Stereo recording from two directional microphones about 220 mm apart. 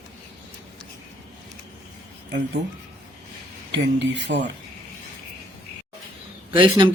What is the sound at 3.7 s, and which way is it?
Speech, 50° right (ahead or behind).